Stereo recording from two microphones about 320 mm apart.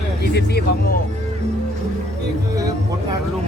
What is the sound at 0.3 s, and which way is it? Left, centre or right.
Speech, left.